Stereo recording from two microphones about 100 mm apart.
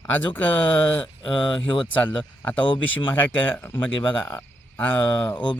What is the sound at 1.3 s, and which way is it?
Speech, 55° left (ahead or behind).